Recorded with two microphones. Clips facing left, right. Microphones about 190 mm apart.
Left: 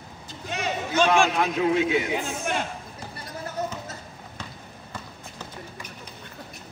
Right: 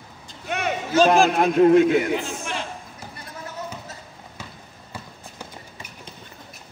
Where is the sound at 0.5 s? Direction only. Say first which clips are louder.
Right 4 dB; 60° right (ahead or behind).